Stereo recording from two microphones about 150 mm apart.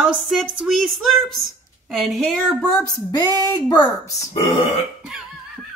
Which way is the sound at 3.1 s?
30° left (ahead or behind).